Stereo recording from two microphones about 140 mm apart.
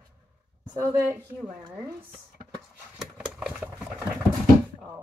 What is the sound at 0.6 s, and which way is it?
Speech, 25° right (ahead or behind).